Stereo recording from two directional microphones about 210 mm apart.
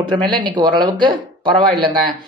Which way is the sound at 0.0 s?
20° right (ahead or behind).